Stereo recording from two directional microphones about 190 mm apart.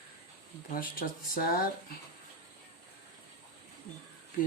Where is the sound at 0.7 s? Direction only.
50° left (ahead or behind).